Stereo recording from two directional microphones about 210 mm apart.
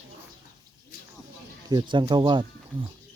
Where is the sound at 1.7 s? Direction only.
20° right (ahead or behind).